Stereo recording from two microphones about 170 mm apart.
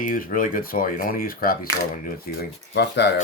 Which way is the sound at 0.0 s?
55° left (ahead or behind).